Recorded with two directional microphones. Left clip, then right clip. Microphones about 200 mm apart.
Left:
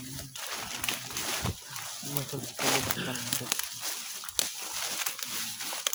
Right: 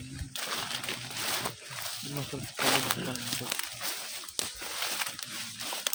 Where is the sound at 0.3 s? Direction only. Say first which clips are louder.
Right 4 dB; 40° right (ahead or behind).